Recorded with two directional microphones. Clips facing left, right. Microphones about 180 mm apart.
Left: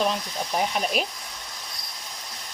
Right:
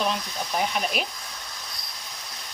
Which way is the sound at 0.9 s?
40° left (ahead or behind).